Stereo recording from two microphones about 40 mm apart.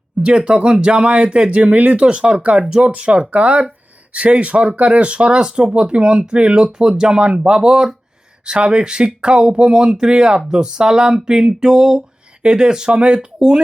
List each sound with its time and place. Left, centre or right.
0.2 s speech: right
8.4 s speech: right